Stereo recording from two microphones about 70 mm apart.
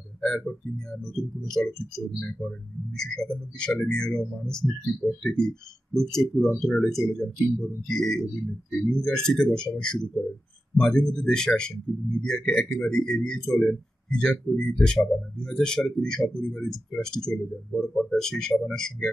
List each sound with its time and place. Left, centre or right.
0.2 s speech: centre
2.1 s speech: centre
4.6 s speech: left
5.2 s speech: centre